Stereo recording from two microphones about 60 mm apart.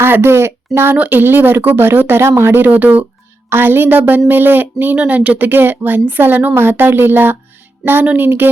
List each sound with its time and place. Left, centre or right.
0.0 s speech: right
0.9 s speech: right
1.2 s speech: right
5.5 s speech: right